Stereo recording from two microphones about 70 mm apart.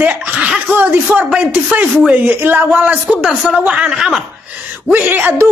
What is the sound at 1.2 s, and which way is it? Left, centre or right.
A woman's voice, centre.